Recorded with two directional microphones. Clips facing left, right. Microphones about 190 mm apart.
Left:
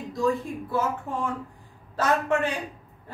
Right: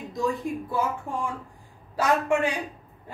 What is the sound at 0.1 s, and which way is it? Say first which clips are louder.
A woman's voice: left 2 dB; 15° right (ahead or behind).